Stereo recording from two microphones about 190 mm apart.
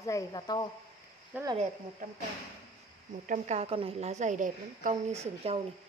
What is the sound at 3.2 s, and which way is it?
A woman's voice, 40° right (ahead or behind).